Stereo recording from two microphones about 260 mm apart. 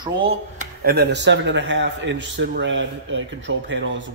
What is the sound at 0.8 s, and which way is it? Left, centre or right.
A man's voice, right.